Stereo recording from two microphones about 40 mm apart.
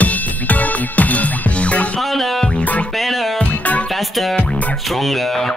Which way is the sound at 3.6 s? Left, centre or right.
Left.